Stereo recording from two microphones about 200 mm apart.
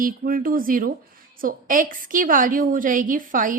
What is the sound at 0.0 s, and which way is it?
A woman's voice, 45° right (ahead or behind).